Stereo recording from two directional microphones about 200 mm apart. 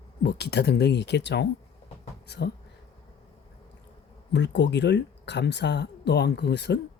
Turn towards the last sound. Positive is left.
turn(degrees=60)  # may be behind; listen again after turning